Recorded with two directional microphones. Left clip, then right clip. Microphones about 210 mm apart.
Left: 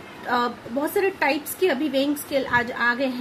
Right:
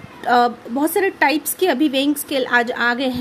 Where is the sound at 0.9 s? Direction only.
55° right (ahead or behind).